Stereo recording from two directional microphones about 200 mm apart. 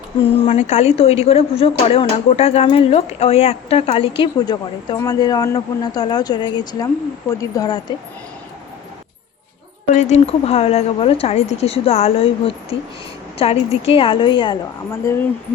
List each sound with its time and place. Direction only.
0.2 s speech: 30° left (ahead or behind)
9.9 s a woman's voice: 35° left (ahead or behind)